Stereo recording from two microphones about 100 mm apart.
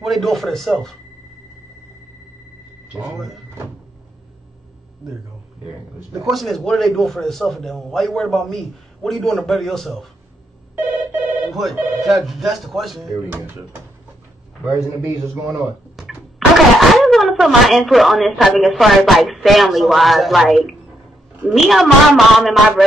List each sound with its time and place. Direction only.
0.0 s a man's voice: centre (ahead or behind)
2.9 s a man's voice: 5° right (ahead or behind)
6.2 s a man's voice: centre (ahead or behind)
10.8 s telephone bell ringing: 20° right (ahead or behind)
11.5 s a man's voice: centre (ahead or behind)
13.2 s speech: 20° right (ahead or behind)
15.1 s speech: 30° right (ahead or behind)
16.0 s a man's voice: 5° right (ahead or behind)